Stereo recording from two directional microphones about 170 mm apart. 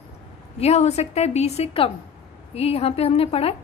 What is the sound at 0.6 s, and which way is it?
A woman's voice, 40° left (ahead or behind).